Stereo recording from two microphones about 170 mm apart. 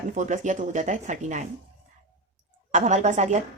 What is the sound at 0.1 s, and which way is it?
Speech, 45° right (ahead or behind).